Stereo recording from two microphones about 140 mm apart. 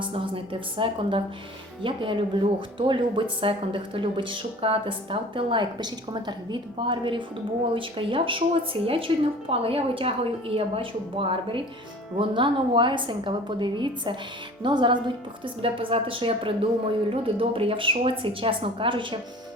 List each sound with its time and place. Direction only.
0.0 s a woman's voice: 40° right (ahead or behind)